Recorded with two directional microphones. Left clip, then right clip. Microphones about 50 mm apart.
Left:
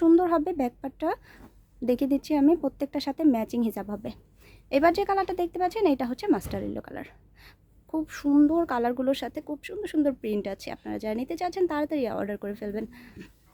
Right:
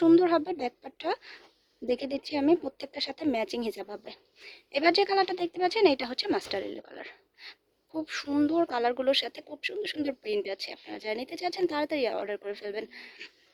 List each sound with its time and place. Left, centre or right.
0.0 s speech: left
8.0 s speech: left
10.1 s speech: left
10.6 s speech: left